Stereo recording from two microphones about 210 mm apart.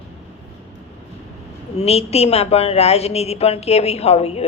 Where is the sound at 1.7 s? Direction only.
30° left (ahead or behind).